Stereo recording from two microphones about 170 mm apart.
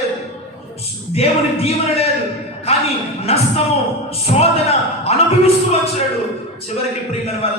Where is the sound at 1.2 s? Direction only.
35° left (ahead or behind).